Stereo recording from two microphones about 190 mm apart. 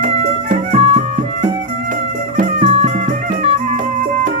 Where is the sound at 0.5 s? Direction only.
35° right (ahead or behind).